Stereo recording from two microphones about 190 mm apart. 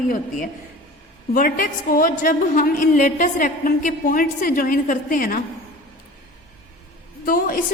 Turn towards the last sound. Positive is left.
turn(degrees=50)  # may be behind; listen again after turning